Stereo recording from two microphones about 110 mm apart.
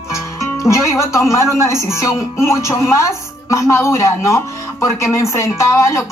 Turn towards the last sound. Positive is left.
turn(degrees=25)  # may be behind; listen again after turning